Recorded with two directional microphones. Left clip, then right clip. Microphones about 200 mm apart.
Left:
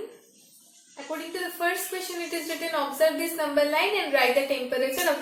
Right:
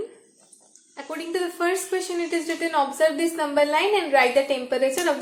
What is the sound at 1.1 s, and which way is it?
Speech, 45° right (ahead or behind).